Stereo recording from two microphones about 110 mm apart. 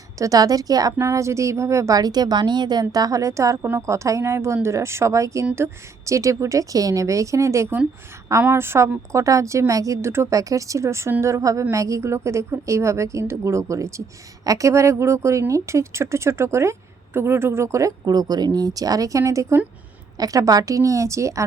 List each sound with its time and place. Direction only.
0.2 s a woman's voice: 35° right (ahead or behind)